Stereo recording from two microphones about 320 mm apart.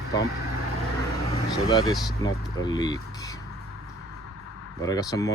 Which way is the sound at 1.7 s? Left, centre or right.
Centre.